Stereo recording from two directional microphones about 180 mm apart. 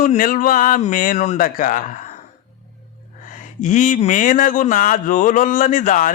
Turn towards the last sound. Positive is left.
turn(degrees=45)  # may be behind; listen again after turning